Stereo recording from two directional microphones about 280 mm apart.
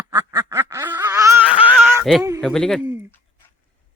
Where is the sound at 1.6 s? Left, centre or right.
Centre.